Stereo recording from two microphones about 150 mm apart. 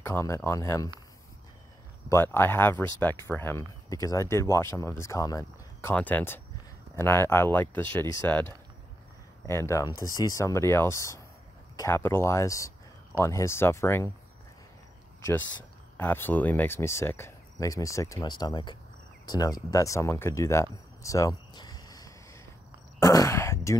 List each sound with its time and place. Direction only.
0.0 s speech: 15° left (ahead or behind)
2.0 s speech: 15° left (ahead or behind)
16.0 s speech: 10° left (ahead or behind)
22.9 s a sound: 20° left (ahead or behind)